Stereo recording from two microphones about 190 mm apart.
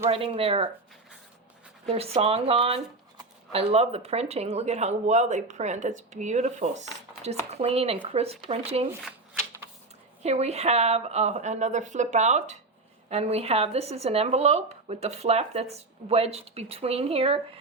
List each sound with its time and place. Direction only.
0.0 s speech: 30° right (ahead or behind)
1.9 s speech: 30° right (ahead or behind)
10.2 s speech: 35° right (ahead or behind)